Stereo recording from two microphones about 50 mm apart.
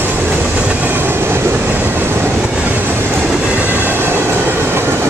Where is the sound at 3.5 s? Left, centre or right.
Right.